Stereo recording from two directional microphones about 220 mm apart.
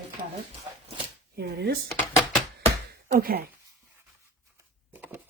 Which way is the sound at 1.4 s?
45° right (ahead or behind).